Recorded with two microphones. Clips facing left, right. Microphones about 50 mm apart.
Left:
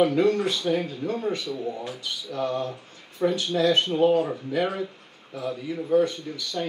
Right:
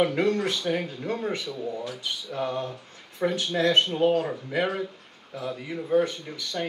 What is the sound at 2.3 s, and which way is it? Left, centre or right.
Speech, centre.